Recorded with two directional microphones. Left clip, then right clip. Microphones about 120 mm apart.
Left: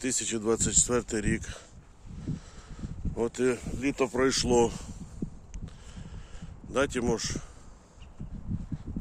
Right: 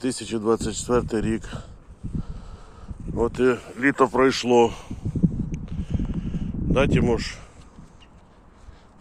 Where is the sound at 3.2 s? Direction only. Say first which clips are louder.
Right 7 dB; 15° left (ahead or behind).